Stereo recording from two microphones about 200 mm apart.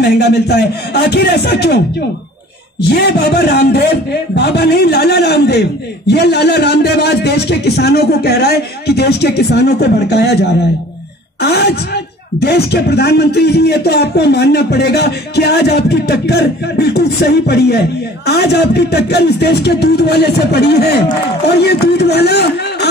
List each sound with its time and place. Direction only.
0.0 s speech: 55° left (ahead or behind)